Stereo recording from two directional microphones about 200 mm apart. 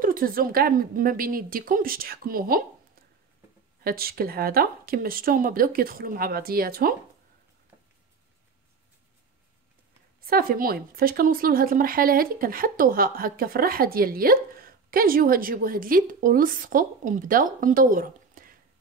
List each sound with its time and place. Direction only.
0.0 s speech: 45° right (ahead or behind)
3.8 s speech: 50° right (ahead or behind)
10.2 s speech: 45° right (ahead or behind)